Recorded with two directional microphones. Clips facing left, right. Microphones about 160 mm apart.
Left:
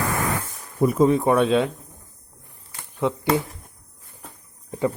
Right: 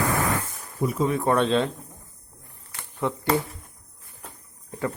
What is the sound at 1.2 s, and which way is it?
Speech, 10° left (ahead or behind).